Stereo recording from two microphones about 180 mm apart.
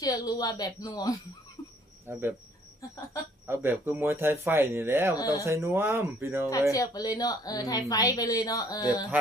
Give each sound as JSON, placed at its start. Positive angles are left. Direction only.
{"t": 0.0, "sound": "a woman's voice", "side_deg": 20}
{"t": 2.1, "sound": "speech", "side_deg": -10}
{"t": 3.4, "sound": "speech", "side_deg": -15}
{"t": 5.1, "sound": "a woman's voice", "side_deg": 20}
{"t": 5.5, "sound": "speech", "side_deg": -15}
{"t": 6.7, "sound": "a woman's voice", "side_deg": 20}